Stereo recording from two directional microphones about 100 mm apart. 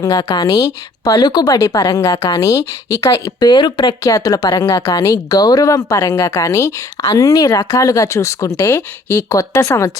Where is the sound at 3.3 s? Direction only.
45° left (ahead or behind).